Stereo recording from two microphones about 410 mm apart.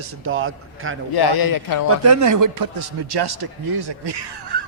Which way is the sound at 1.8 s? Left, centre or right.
Right.